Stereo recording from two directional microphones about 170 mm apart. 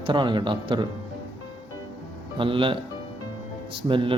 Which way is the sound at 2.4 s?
30° right (ahead or behind).